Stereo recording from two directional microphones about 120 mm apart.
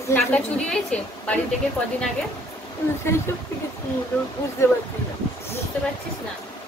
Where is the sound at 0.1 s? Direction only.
10° left (ahead or behind).